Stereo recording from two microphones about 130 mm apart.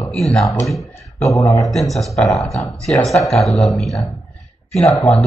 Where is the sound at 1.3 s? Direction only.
25° left (ahead or behind).